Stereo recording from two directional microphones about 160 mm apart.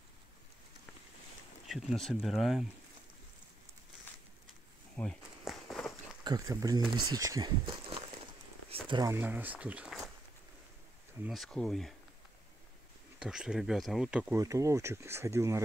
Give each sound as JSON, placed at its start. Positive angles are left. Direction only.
{"t": 1.7, "sound": "speech", "side_deg": 0}
{"t": 5.0, "sound": "speech", "side_deg": 10}
{"t": 5.4, "sound": "walk", "side_deg": 0}
{"t": 6.2, "sound": "speech", "side_deg": -20}
{"t": 8.6, "sound": "a sound", "side_deg": -30}
{"t": 9.1, "sound": "speech", "side_deg": -10}
{"t": 11.2, "sound": "speech", "side_deg": 0}
{"t": 13.2, "sound": "speech", "side_deg": -5}
{"t": 14.3, "sound": "speech", "side_deg": -20}